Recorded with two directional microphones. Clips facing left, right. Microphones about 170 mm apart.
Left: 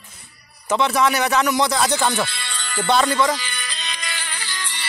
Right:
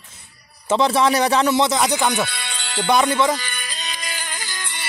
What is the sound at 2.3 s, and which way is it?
Music, 65° right (ahead or behind).